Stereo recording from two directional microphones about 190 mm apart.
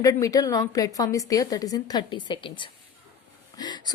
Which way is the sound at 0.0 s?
15° left (ahead or behind).